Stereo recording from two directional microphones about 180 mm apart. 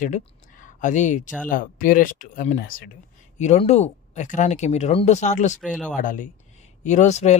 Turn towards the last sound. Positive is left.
turn(degrees=40)  # may be behind; listen again after turning